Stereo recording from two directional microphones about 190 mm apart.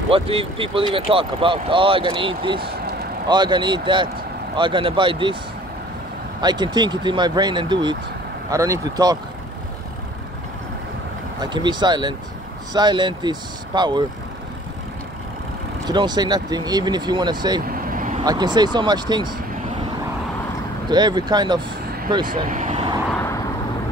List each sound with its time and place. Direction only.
0.1 s speech: 30° right (ahead or behind)
6.4 s speech: 20° right (ahead or behind)
11.4 s speech: 25° right (ahead or behind)
15.9 s speech: 20° right (ahead or behind)
17.8 s vehicle: 45° right (ahead or behind)
18.2 s speech: 20° right (ahead or behind)
20.9 s speech: 25° right (ahead or behind)
22.5 s speech: 40° right (ahead or behind)
23.0 s vehicle: 10° left (ahead or behind)